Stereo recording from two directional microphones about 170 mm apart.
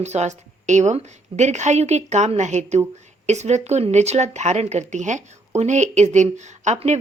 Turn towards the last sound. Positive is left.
turn(degrees=-40)  # may be behind; listen again after turning